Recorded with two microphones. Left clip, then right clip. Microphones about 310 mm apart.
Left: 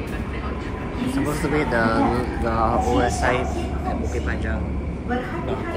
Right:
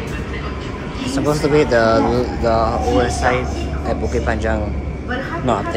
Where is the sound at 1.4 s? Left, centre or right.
Centre.